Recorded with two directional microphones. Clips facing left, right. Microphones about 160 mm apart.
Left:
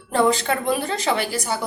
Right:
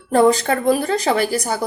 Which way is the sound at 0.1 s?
40° right (ahead or behind).